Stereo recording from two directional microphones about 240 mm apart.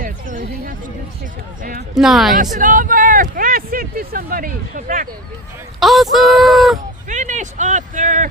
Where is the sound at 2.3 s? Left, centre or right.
Right.